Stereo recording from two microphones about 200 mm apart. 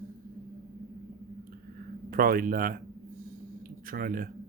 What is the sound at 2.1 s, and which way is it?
Speech, 45° right (ahead or behind).